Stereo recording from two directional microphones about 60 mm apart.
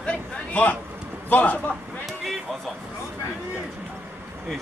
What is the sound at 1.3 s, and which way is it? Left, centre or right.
Speech, left.